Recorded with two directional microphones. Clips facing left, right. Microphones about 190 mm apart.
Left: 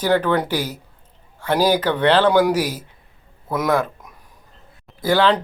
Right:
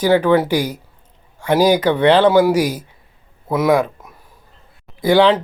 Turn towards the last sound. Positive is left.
turn(degrees=-15)  # may be behind; listen again after turning